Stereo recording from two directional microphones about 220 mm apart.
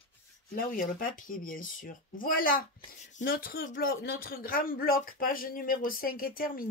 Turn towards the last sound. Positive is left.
turn(degrees=40)  # may be behind; listen again after turning